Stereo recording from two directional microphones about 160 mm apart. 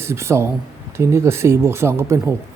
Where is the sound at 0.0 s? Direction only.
15° right (ahead or behind).